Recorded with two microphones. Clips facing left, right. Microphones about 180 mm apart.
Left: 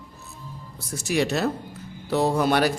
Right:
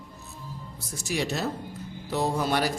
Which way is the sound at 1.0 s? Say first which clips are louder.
Left 6 dB; 70° left (ahead or behind).